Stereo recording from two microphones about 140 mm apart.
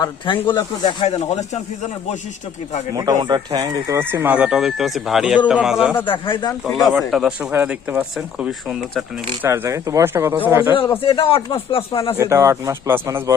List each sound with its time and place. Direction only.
0.0 s speech: 35° left (ahead or behind)
1.0 s speech: 50° left (ahead or behind)
2.9 s speech: 25° right (ahead or behind)
3.9 s speech: 15° right (ahead or behind)
6.1 s speech: 35° left (ahead or behind)
7.1 s speech: 5° right (ahead or behind)
9.4 s speech: 20° right (ahead or behind)
11.0 s speech: 40° left (ahead or behind)
12.1 s speech: 20° right (ahead or behind)